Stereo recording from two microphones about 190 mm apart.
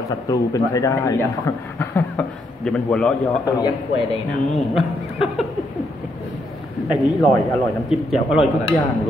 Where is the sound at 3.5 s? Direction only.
20° left (ahead or behind).